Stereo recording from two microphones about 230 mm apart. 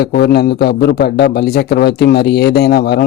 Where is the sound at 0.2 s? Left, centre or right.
Left.